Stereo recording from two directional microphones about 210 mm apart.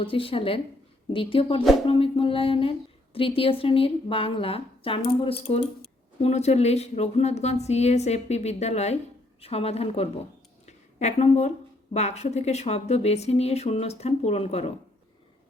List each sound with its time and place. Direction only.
0.0 s a woman's voice: 25° left (ahead or behind)